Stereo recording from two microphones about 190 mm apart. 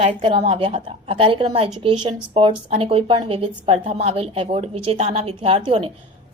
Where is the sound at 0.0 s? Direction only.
30° right (ahead or behind).